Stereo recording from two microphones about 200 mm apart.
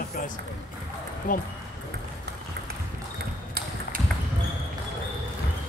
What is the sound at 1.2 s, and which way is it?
Speech, 45° left (ahead or behind).